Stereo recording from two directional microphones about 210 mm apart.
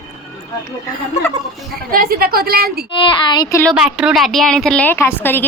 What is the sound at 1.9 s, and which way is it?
Speech, 45° right (ahead or behind).